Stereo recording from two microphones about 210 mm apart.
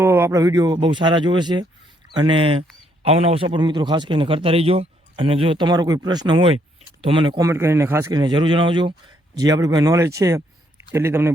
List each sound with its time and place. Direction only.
0.0 s a man's voice: 10° right (ahead or behind)